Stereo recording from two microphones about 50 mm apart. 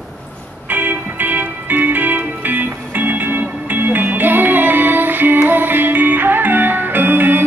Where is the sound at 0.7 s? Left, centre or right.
Right.